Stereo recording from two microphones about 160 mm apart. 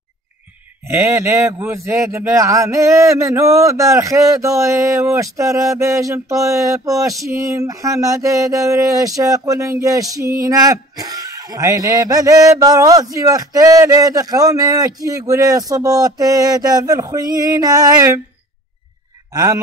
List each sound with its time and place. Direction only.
0.8 s speech: 15° right (ahead or behind)
19.3 s speech: 20° right (ahead or behind)